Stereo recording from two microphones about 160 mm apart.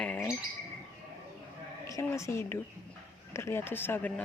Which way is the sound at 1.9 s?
20° left (ahead or behind).